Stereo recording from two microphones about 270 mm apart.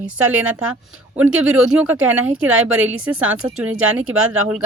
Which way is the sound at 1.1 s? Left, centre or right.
Centre.